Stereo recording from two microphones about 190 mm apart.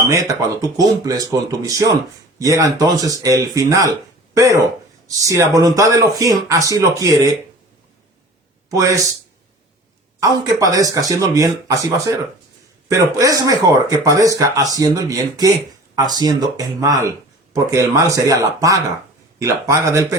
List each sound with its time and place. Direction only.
0.1 s speech: 15° right (ahead or behind)
8.7 s speech: 15° right (ahead or behind)
10.2 s speech: 20° right (ahead or behind)